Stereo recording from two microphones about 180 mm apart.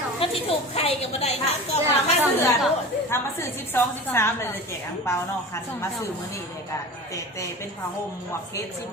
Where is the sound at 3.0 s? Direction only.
15° left (ahead or behind).